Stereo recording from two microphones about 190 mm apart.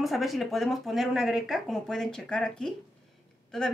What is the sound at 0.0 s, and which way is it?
Speech, centre (ahead or behind).